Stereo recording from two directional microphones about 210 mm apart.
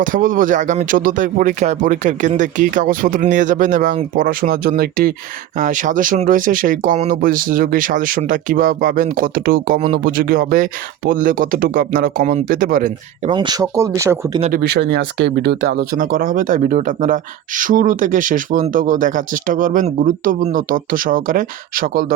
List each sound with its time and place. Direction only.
0.0 s speech: 40° right (ahead or behind)
13.3 s speech: 20° right (ahead or behind)
14.5 s speech: 50° right (ahead or behind)